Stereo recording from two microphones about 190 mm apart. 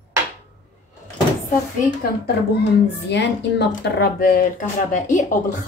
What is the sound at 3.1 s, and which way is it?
A woman's voice, 65° left (ahead or behind).